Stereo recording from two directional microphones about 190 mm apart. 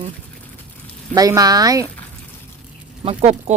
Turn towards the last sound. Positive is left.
turn(degrees=-35)  # may be behind; listen again after turning